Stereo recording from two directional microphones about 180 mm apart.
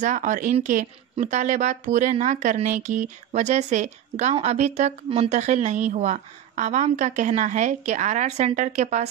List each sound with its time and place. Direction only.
0.0 s a woman's voice: 45° right (ahead or behind)